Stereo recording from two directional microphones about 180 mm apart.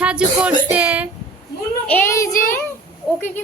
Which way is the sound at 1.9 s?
10° left (ahead or behind).